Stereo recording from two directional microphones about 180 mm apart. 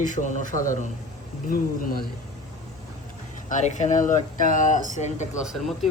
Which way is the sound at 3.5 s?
40° left (ahead or behind).